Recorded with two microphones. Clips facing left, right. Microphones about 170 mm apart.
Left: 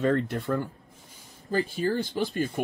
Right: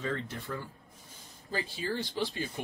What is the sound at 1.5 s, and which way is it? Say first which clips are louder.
Speech: left 8 dB; 50° left (ahead or behind).